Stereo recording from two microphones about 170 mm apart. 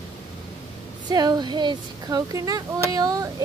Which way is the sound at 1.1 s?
25° right (ahead or behind).